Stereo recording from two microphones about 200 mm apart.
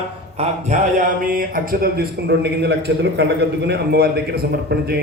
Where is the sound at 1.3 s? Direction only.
45° right (ahead or behind).